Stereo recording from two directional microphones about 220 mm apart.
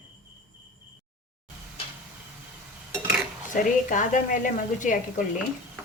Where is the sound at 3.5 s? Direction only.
35° left (ahead or behind).